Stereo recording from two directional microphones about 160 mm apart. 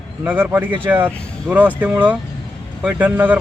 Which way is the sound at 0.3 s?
10° right (ahead or behind).